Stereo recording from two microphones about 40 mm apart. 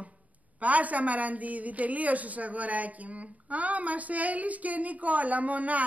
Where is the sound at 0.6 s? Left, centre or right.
Right.